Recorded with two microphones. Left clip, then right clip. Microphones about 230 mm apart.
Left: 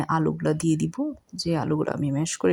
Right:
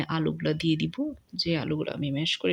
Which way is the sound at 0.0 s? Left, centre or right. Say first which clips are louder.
Left 4 dB; centre.